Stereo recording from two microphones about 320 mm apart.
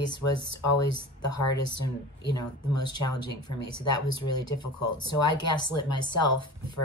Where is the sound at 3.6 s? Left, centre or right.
Left.